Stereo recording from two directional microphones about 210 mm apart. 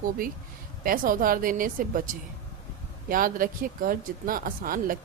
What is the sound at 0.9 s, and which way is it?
Speech, 40° right (ahead or behind).